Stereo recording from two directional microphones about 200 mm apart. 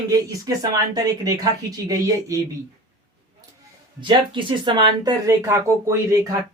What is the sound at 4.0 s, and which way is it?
Speech, 25° right (ahead or behind).